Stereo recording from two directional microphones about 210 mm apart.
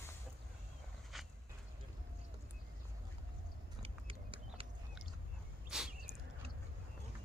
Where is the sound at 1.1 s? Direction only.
Centre (ahead or behind).